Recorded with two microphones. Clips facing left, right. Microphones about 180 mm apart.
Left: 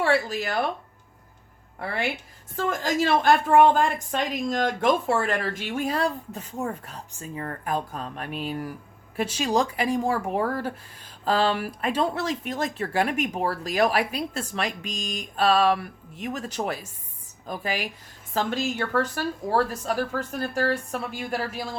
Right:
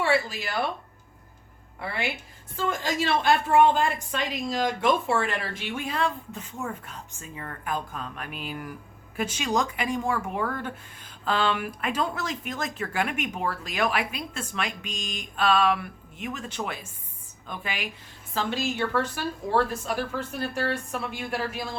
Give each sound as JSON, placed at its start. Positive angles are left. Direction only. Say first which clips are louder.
{"t": 0.0, "sound": "speech", "louder": "left 2 dB", "side_deg": 45}
{"t": 1.8, "sound": "a woman's voice", "louder": "left 3 dB", "side_deg": 45}